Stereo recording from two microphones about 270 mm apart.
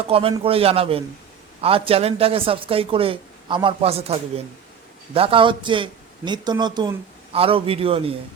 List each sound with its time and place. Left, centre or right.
0.1 s a man's voice: right